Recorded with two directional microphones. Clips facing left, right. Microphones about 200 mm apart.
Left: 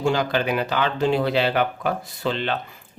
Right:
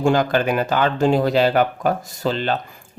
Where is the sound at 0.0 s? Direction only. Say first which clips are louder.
Right 4 dB; 50° right (ahead or behind).